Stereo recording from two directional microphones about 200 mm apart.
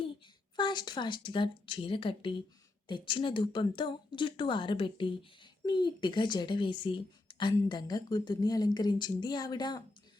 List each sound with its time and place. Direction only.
0.5 s a woman's voice: 20° left (ahead or behind)